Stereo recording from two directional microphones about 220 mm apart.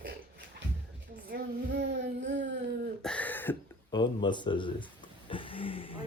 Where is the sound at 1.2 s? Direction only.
45° right (ahead or behind).